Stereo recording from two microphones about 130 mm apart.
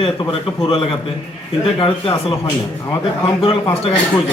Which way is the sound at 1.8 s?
45° left (ahead or behind).